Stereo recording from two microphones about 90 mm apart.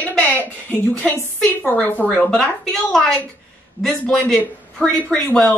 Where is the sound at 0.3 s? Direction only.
20° left (ahead or behind).